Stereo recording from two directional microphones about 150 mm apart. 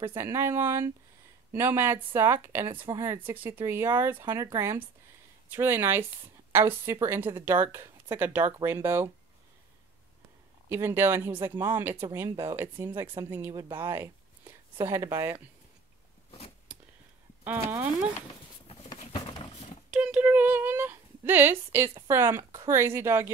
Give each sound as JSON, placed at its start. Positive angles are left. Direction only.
{"t": 0.0, "sound": "a woman's voice", "side_deg": -15}
{"t": 10.7, "sound": "a woman's voice", "side_deg": -15}
{"t": 16.3, "sound": "biting", "side_deg": 40}
{"t": 17.5, "sound": "a woman's voice", "side_deg": -10}
{"t": 19.9, "sound": "speech", "side_deg": -5}